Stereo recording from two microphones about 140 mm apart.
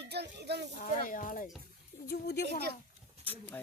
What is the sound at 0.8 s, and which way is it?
Speech, 75° left (ahead or behind).